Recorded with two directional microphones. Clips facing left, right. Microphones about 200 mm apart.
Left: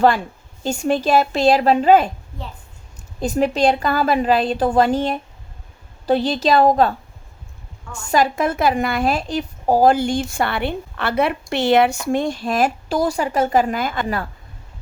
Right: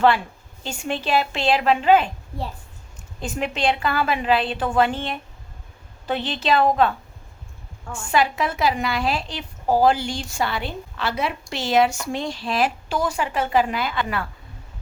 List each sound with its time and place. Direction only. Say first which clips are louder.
0.6 s a woman's voice: left 8 dB; 45° left (ahead or behind)
3.2 s a woman's voice: left 8 dB; 40° left (ahead or behind)
7.9 s a woman's voice: left 3 dB; 40° left (ahead or behind)